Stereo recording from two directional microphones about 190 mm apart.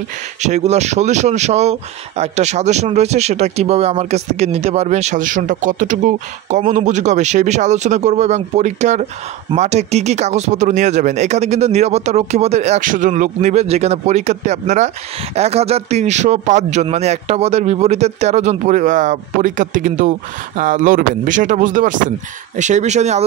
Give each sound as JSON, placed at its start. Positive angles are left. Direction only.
{"t": 0.4, "sound": "a man's voice", "side_deg": -35}